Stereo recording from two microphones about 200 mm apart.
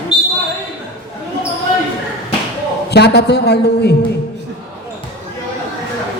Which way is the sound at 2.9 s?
55° left (ahead or behind).